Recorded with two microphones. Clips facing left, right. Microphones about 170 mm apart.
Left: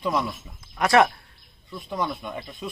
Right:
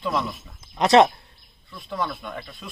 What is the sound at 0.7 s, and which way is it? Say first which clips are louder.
Speech: right 3 dB; 20° right (ahead or behind).